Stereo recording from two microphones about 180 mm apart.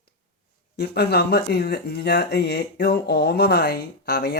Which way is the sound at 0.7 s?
65° left (ahead or behind).